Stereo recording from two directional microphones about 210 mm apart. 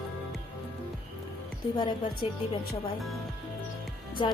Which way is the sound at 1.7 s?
20° left (ahead or behind).